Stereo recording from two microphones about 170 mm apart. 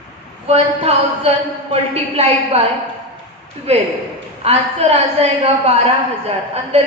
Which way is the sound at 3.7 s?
35° right (ahead or behind).